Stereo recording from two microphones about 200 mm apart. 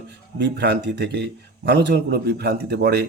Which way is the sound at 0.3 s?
55° right (ahead or behind).